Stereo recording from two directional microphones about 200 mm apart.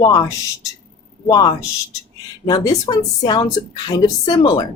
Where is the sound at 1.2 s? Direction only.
20° left (ahead or behind).